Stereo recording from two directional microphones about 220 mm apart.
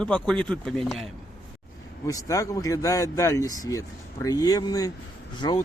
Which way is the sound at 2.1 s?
15° left (ahead or behind).